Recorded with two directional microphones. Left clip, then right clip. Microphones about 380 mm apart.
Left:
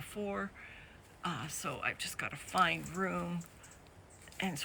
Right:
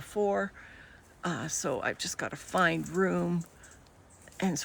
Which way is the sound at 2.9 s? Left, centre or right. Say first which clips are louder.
Right 8 dB; left.